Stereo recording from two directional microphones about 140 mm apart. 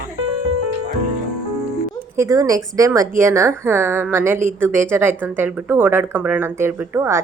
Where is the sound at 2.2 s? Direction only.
25° right (ahead or behind).